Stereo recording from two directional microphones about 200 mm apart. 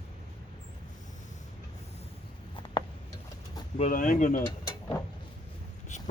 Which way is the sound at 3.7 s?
40° left (ahead or behind).